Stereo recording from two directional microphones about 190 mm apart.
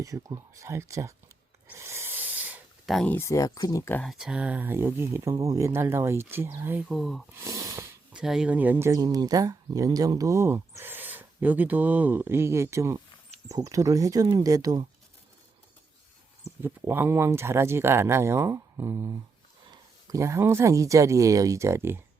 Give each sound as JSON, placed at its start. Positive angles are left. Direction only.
{"t": 0.0, "sound": "speech", "side_deg": -15}
{"t": 1.6, "sound": "a sound", "side_deg": -15}
{"t": 4.1, "sound": "speech", "side_deg": -5}
{"t": 7.3, "sound": "snort", "side_deg": -15}
{"t": 8.2, "sound": "speech", "side_deg": -5}
{"t": 16.6, "sound": "speech", "side_deg": -10}